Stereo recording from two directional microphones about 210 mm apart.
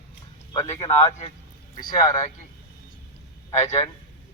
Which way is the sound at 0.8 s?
30° left (ahead or behind).